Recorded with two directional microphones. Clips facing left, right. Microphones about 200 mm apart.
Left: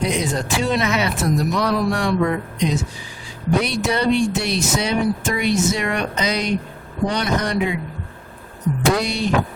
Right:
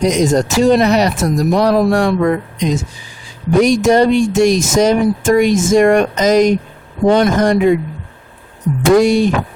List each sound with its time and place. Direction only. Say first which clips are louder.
0.0 s speech: right 9 dB; 45° right (ahead or behind)
8.8 s speech: right 11 dB; 50° right (ahead or behind)